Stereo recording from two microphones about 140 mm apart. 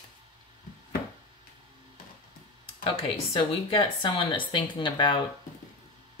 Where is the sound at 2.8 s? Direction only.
40° left (ahead or behind).